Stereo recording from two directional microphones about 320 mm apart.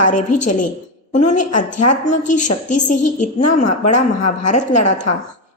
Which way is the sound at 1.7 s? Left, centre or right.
Left.